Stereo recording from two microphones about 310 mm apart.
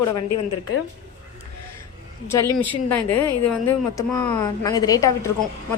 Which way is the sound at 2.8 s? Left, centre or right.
Left.